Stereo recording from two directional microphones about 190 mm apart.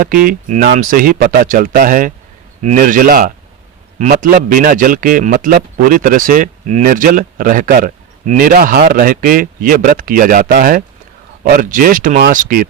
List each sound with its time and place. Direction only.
0.3 s a man's voice: 45° right (ahead or behind)